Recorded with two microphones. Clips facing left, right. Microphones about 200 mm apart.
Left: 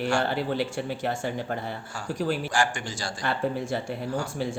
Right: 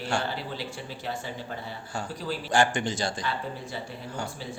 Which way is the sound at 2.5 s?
20° right (ahead or behind).